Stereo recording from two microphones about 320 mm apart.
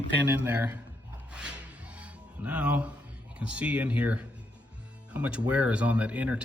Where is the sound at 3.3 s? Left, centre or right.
Centre.